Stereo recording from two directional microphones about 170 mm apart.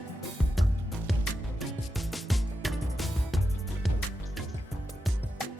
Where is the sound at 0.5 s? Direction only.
Centre (ahead or behind).